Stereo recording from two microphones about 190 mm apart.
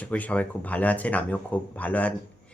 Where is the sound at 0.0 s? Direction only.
5° left (ahead or behind).